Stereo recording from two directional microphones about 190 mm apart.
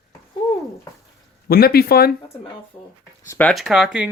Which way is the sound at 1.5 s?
55° left (ahead or behind).